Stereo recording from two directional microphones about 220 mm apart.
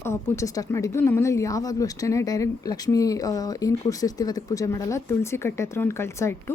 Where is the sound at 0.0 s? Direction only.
15° left (ahead or behind).